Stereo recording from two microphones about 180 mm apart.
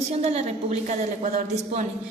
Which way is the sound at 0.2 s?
35° right (ahead or behind).